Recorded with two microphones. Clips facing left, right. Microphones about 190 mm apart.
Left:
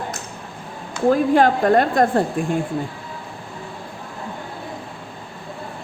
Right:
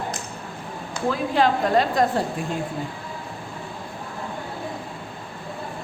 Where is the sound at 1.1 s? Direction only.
50° left (ahead or behind).